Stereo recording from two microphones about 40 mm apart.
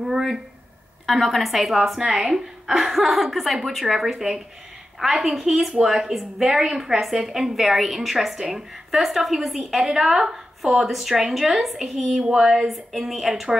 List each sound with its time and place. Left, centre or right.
0.0 s a sound: centre
1.0 s a woman's voice: centre
2.0 s a woman's voice: centre
12.1 s a woman's voice: centre
12.6 s a woman's voice: centre